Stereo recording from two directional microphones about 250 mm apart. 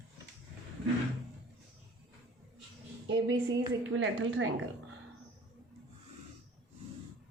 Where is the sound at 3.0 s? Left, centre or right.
Right.